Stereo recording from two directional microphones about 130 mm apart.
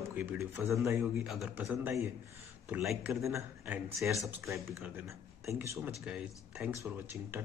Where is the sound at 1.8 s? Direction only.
20° right (ahead or behind).